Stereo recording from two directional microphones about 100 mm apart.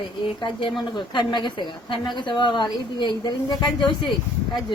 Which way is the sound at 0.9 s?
50° left (ahead or behind).